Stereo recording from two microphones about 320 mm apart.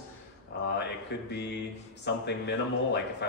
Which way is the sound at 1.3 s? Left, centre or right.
Left.